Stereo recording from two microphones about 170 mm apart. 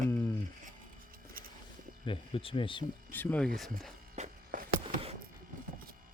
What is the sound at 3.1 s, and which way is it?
Speech, 10° left (ahead or behind).